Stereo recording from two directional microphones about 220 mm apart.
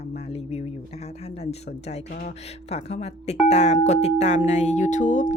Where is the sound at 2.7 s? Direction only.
30° left (ahead or behind).